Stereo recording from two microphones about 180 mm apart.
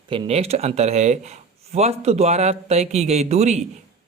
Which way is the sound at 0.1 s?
35° right (ahead or behind).